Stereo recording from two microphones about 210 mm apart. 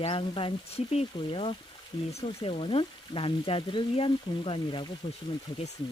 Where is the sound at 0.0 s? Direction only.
25° left (ahead or behind).